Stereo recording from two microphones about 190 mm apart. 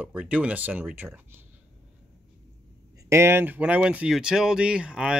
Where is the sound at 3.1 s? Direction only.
15° right (ahead or behind).